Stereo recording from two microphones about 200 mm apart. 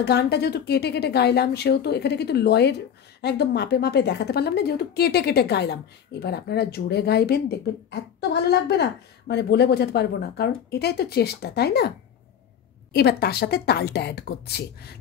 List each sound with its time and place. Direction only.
0.0 s speech: 55° left (ahead or behind)
12.9 s speech: 55° left (ahead or behind)